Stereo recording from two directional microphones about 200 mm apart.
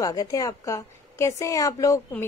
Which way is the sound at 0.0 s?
15° left (ahead or behind).